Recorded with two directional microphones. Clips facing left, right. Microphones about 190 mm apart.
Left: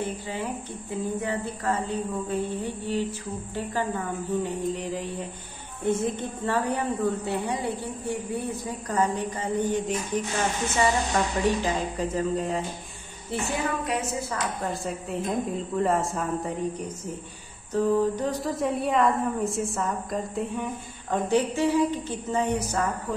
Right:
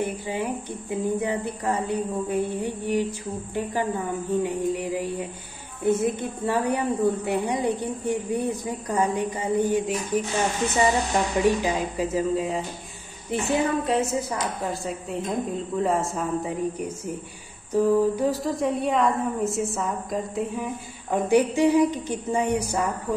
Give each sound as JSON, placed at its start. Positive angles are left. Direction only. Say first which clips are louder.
{"t": 0.0, "sound": "speech", "louder": "right 3 dB", "side_deg": -15}
{"t": 11.4, "sound": "a woman's voice", "louder": "right 3 dB", "side_deg": -10}
{"t": 13.3, "sound": "a woman's voice", "louder": "right 5 dB", "side_deg": -20}
{"t": 14.6, "sound": "a woman's voice", "louder": "right 1 dB", "side_deg": 0}